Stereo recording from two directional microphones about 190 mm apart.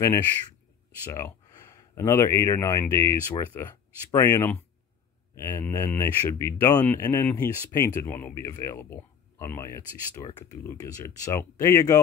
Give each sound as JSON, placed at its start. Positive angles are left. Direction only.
{"t": 1.1, "sound": "speech", "side_deg": 15}